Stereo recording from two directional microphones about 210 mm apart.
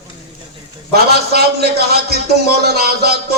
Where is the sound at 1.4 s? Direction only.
50° right (ahead or behind).